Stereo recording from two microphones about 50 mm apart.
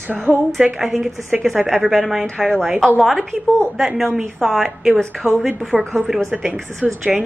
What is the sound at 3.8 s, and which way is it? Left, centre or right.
A woman's voice, centre.